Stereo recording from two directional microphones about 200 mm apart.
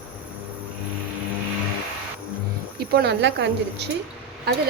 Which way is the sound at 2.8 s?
50° right (ahead or behind).